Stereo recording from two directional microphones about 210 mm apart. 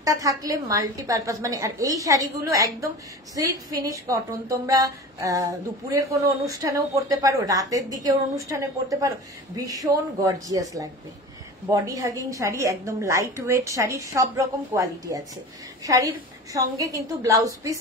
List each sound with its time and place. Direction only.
0.0 s a woman's voice: 15° right (ahead or behind)